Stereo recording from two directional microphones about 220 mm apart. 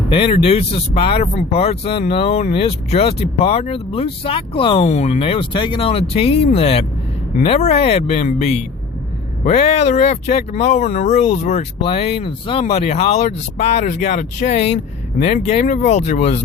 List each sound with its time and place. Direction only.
0.1 s speech: 25° left (ahead or behind)